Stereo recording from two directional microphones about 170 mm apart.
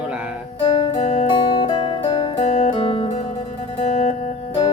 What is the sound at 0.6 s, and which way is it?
Guitar, 25° left (ahead or behind).